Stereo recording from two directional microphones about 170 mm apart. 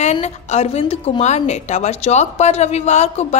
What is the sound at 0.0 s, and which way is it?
A woman's voice, 40° left (ahead or behind).